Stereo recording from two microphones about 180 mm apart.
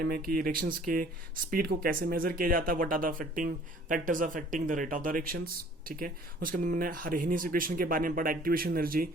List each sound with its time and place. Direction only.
0.0 s speech: 55° right (ahead or behind)